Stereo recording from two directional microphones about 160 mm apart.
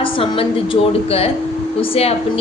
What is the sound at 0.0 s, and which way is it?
A woman's voice, 35° left (ahead or behind).